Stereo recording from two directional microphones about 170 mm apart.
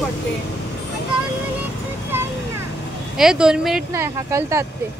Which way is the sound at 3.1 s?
5° right (ahead or behind).